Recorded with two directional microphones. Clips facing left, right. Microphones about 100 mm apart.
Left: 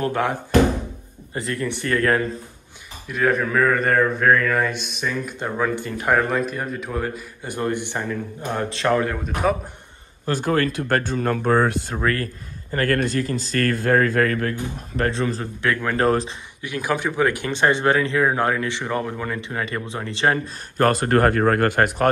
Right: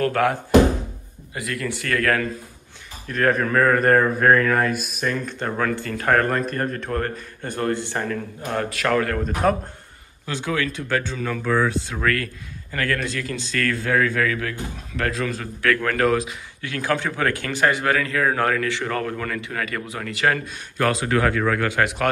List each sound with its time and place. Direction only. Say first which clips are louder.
0.0 s speech: right 2 dB; 20° left (ahead or behind)
3.1 s speech: even; 5° left (ahead or behind); by 9.2 s 20° left (ahead or behind)
9.2 s speech: right 1 dB; 5° left (ahead or behind)
10.2 s speech: left 4 dB; 45° left (ahead or behind)
12.0 s speech: even; 30° left (ahead or behind)
12.7 s speech: left 4 dB; 45° left (ahead or behind); by 16.1 s 20° left (ahead or behind)
16.1 s speech: left 1 dB; 35° left (ahead or behind)
16.6 s speech: even; 15° left (ahead or behind); by 22.1 s 40° left (ahead or behind)